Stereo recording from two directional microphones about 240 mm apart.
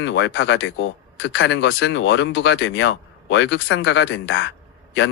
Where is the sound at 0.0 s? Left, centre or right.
Left.